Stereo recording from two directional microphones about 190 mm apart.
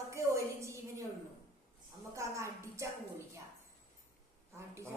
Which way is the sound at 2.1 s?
15° right (ahead or behind).